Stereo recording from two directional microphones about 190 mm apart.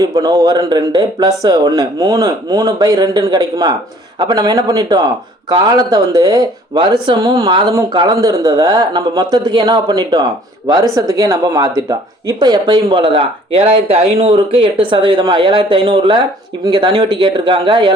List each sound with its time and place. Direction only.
0.0 s speech: 20° right (ahead or behind)